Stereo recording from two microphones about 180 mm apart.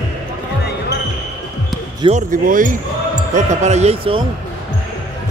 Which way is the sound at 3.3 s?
40° right (ahead or behind).